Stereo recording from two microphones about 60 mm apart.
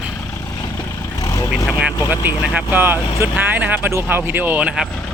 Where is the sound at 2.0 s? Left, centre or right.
Right.